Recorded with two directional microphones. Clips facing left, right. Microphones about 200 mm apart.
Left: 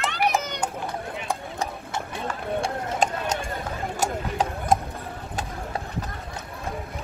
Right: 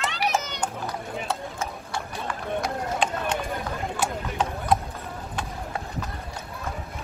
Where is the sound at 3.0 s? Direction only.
45° left (ahead or behind).